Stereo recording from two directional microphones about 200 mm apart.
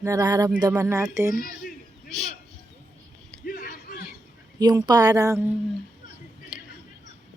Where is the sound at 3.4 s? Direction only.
45° left (ahead or behind).